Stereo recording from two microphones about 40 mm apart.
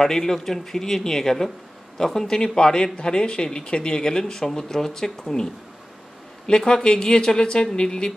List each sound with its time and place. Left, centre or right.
0.0 s speech: centre